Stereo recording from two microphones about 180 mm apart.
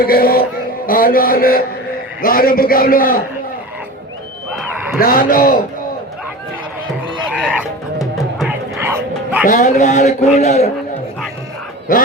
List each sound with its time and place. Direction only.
0.0 s a man's voice: 55° left (ahead or behind)
4.5 s a sound: centre (ahead or behind)
4.9 s a man's voice: 55° left (ahead or behind)
7.6 s music: centre (ahead or behind)
8.7 s bow-wow: 15° right (ahead or behind)
9.5 s speech: 45° left (ahead or behind)